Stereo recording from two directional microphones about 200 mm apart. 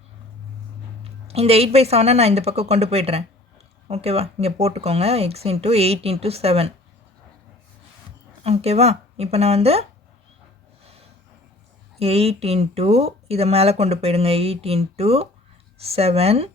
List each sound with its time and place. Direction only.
1.0 s speech: 30° right (ahead or behind)
8.4 s speech: 30° right (ahead or behind)
11.9 s speech: 30° right (ahead or behind)